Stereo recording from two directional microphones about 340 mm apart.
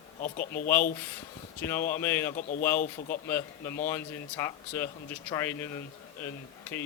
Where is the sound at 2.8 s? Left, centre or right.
Left.